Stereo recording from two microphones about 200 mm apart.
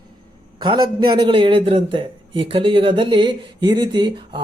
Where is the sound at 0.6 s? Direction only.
20° right (ahead or behind).